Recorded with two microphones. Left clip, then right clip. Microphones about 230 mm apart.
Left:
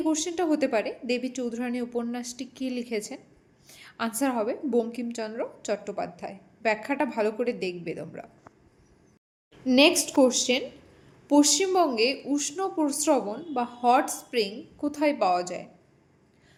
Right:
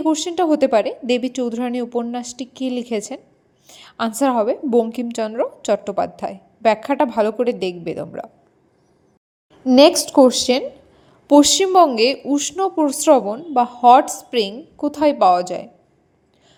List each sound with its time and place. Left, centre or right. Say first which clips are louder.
0.0 s a woman's voice: right 8 dB; right
9.6 s a woman's voice: right 9 dB; right